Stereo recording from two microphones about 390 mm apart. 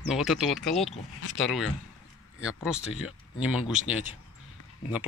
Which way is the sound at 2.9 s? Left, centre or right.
Left.